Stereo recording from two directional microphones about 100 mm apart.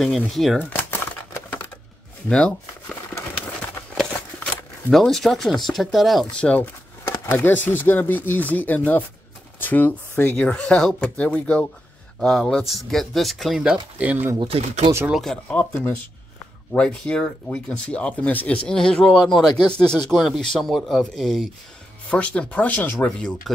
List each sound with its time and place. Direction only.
0.3 s speech: centre (ahead or behind)
0.6 s crumpling: 20° left (ahead or behind)
2.2 s crumpling: 10° left (ahead or behind)
3.9 s a sound: 5° left (ahead or behind)
4.9 s speech: 5° left (ahead or behind)
6.3 s speech: 15° left (ahead or behind); by 13.7 s 5° right (ahead or behind)
13.9 s speech: 15° right (ahead or behind)
15.0 s speech: centre (ahead or behind)
15.4 s speech: 15° left (ahead or behind)
16.7 s speech: 10° left (ahead or behind)
23.0 s speech: 5° left (ahead or behind)